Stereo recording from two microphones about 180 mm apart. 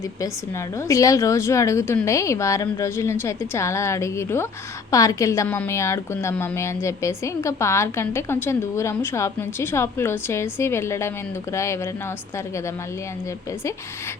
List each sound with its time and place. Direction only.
0.9 s a woman's voice: 15° left (ahead or behind)